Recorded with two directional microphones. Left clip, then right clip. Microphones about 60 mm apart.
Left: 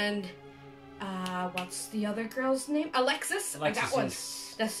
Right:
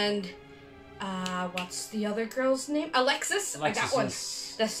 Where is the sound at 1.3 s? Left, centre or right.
Right.